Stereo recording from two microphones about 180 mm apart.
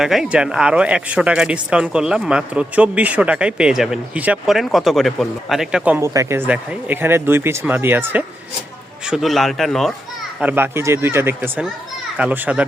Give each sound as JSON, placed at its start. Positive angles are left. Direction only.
{"t": 0.0, "sound": "speech", "side_deg": 0}
{"t": 10.4, "sound": "speech", "side_deg": -10}